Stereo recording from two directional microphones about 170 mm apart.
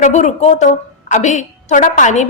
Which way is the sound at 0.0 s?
45° left (ahead or behind).